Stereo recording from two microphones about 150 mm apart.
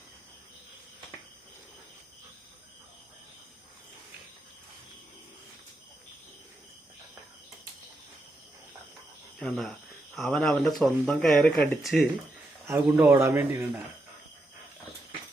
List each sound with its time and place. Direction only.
9.4 s speech: 5° left (ahead or behind)
11.8 s speech: centre (ahead or behind)
12.6 s speech: 20° right (ahead or behind)